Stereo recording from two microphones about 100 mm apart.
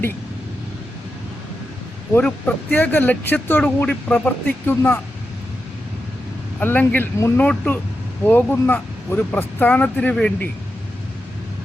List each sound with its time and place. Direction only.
2.2 s speech: 15° left (ahead or behind)
6.6 s speech: 20° left (ahead or behind)